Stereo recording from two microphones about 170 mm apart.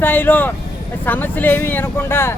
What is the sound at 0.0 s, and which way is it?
Speech, 10° left (ahead or behind).